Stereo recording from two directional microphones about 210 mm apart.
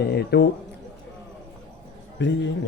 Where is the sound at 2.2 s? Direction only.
60° left (ahead or behind).